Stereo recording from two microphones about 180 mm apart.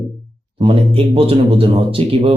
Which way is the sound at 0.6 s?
30° right (ahead or behind).